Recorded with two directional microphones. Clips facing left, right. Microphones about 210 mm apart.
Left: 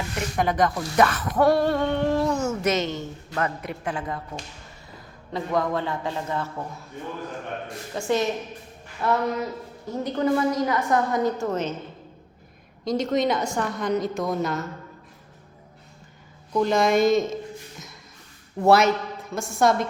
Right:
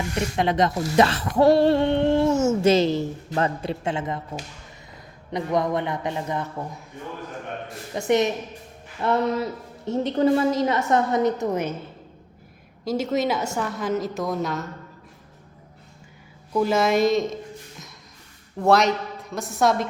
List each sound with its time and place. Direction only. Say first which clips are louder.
0.3 s speech: even; 25° right (ahead or behind)
5.3 s speech: right 2 dB; 20° right (ahead or behind)
7.9 s speech: right 3 dB; 20° right (ahead or behind)
12.8 s a woman's voice: left 1 dB; 5° right (ahead or behind)
16.5 s a woman's voice: even; 5° right (ahead or behind)
18.6 s a woman's voice: left 1 dB; 5° left (ahead or behind)